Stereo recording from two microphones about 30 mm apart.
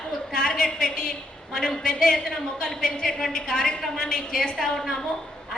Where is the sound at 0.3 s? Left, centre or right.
Left.